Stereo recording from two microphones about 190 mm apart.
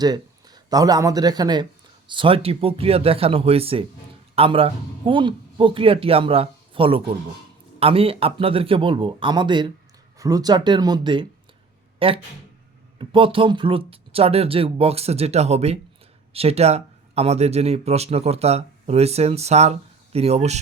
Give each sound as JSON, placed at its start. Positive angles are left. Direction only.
{"t": 0.0, "sound": "speech", "side_deg": -20}